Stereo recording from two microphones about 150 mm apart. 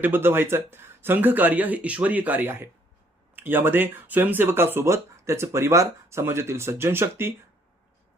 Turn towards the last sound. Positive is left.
turn(degrees=-15)  # may be behind; listen again after turning